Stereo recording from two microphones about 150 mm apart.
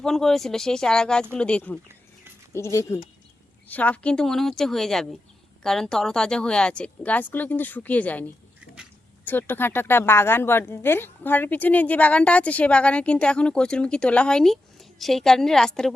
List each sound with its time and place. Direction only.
0.0 s a woman's voice: centre (ahead or behind)
2.5 s a woman's voice: 20° left (ahead or behind)
9.2 s a woman's voice: 15° left (ahead or behind)